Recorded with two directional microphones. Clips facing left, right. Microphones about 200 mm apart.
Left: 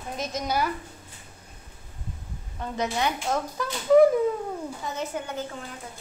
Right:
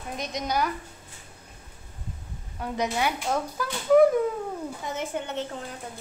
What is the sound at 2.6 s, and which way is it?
Speech, 10° right (ahead or behind).